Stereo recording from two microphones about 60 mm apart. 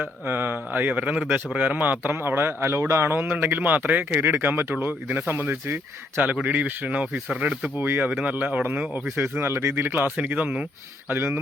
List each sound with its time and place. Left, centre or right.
0.0 s speech: right
2.1 s speech: right
3.4 s speech: right
6.4 s speech: right
7.8 s speech: right
9.4 s speech: right
11.1 s speech: right